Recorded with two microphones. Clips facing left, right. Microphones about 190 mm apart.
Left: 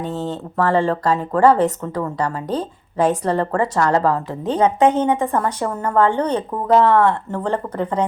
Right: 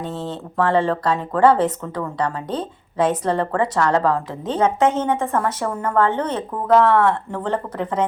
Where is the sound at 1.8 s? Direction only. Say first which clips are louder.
Left 1 dB; 30° left (ahead or behind).